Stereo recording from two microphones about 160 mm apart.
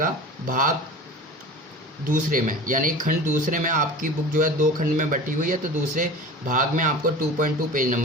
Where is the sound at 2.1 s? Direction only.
60° right (ahead or behind).